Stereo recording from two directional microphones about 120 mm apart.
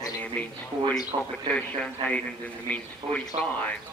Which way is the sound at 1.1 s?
45° right (ahead or behind).